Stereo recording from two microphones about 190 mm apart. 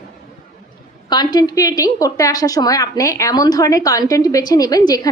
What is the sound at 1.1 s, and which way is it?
A woman's voice, 20° left (ahead or behind).